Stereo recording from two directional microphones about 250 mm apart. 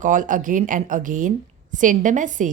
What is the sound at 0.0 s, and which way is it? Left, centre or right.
A woman's voice, right.